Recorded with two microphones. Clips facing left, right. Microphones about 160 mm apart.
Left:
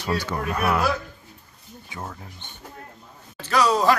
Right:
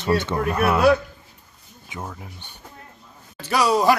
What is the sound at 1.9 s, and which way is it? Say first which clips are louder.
Speech: right 2 dB; 20° right (ahead or behind).